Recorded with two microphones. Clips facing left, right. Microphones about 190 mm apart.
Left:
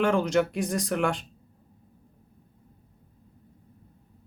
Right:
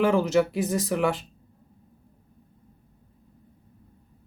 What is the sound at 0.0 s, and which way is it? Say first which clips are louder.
Speech: right 2 dB; 5° right (ahead or behind).